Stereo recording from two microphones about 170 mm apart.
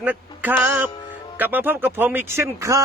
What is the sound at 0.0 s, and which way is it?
Music, 10° right (ahead or behind).